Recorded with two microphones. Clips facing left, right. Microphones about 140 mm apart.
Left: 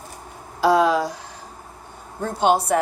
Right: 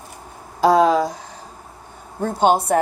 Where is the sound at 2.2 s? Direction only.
50° right (ahead or behind).